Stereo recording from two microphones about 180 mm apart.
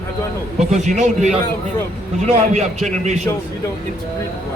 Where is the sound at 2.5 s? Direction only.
40° right (ahead or behind).